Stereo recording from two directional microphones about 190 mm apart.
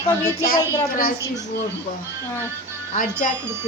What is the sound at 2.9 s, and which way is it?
Speech, 45° left (ahead or behind).